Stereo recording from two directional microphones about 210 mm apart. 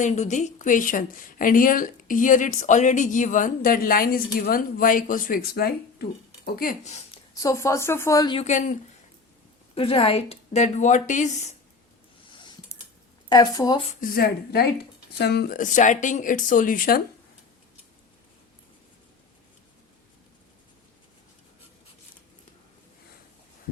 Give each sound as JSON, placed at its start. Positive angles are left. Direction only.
{"t": 0.0, "sound": "speech", "side_deg": 35}
{"t": 7.3, "sound": "speech", "side_deg": 15}
{"t": 8.4, "sound": "speech", "side_deg": 35}
{"t": 9.7, "sound": "speech", "side_deg": 25}
{"t": 12.3, "sound": "a sound", "side_deg": 20}
{"t": 13.2, "sound": "speech", "side_deg": 20}
{"t": 14.0, "sound": "a woman's voice", "side_deg": 45}